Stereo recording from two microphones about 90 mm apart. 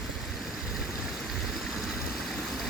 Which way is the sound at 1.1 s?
Centre (ahead or behind).